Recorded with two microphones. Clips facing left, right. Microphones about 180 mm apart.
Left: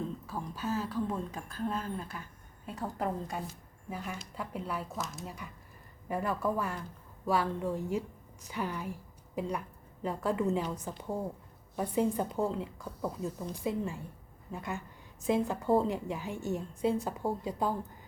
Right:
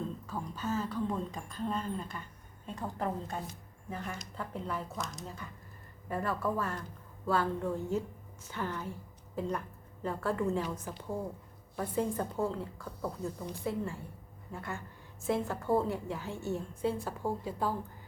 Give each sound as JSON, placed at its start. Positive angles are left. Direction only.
{"t": 0.3, "sound": "a woman's voice", "side_deg": 5}